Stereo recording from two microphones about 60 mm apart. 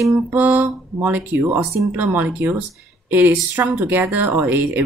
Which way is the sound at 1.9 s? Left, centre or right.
Right.